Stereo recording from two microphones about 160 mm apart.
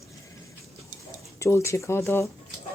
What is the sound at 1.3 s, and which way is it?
Speech, 15° left (ahead or behind).